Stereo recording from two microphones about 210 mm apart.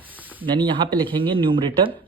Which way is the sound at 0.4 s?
20° right (ahead or behind).